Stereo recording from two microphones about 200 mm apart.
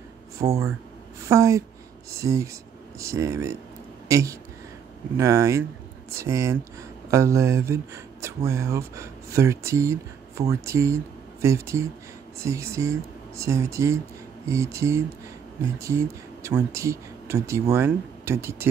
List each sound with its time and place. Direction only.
0.4 s speech: 15° right (ahead or behind)